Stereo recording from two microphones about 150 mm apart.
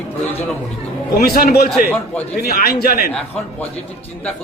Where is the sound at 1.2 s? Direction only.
90° left.